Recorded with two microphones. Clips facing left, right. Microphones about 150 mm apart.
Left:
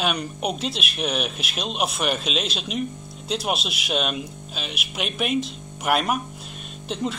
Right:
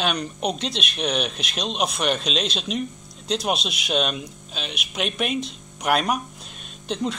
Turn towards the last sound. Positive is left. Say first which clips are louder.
# right 1 dB
turn(degrees=0)  # may be behind; listen again after turning